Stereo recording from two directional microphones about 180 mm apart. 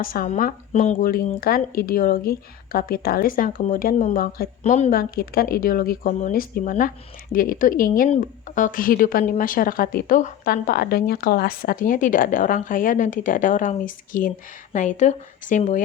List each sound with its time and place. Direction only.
0.0 s a woman's voice: 55° left (ahead or behind)
4.6 s a woman's voice: 40° left (ahead or behind)